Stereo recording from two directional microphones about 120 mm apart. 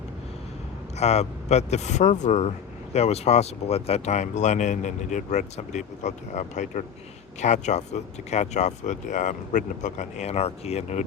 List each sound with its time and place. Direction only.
0.9 s speech: 65° left (ahead or behind); by 6.8 s 90° left
7.4 s speech: 75° left (ahead or behind)